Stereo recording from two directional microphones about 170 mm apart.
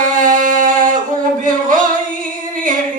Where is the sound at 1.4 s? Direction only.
50° right (ahead or behind).